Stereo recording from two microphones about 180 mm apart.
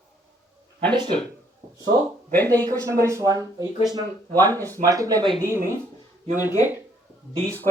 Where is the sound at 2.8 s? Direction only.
15° right (ahead or behind).